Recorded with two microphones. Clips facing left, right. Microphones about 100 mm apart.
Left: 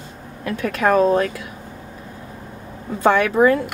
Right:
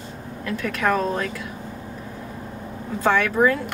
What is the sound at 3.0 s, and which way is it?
Speech, 15° left (ahead or behind).